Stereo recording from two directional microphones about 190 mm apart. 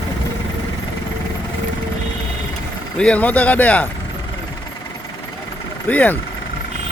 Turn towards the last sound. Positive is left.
turn(degrees=10)  # may be behind; listen again after turning